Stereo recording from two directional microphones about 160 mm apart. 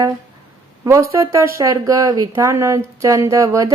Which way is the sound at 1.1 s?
20° right (ahead or behind).